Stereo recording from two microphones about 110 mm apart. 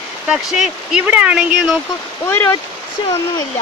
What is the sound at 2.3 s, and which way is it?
Speech, 20° left (ahead or behind).